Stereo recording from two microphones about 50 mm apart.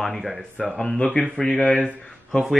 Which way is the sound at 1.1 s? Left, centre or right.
Centre.